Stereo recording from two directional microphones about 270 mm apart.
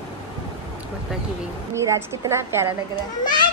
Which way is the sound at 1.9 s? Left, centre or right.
Centre.